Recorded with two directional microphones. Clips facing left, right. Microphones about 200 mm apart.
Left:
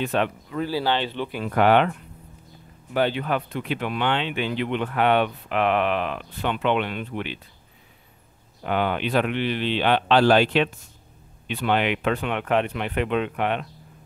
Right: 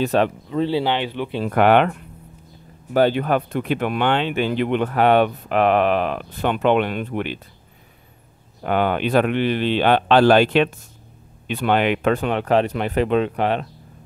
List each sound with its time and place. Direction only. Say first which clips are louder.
0.0 s speech: right 5 dB; 40° right (ahead or behind)
0.5 s speech: right 4 dB; 25° right (ahead or behind)
1.5 s speech: right 3 dB; 60° right (ahead or behind)
2.9 s speech: right 6 dB; 45° right (ahead or behind)
8.6 s speech: right 4 dB; 50° right (ahead or behind)